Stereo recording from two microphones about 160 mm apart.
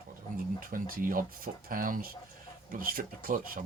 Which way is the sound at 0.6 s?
60° right (ahead or behind).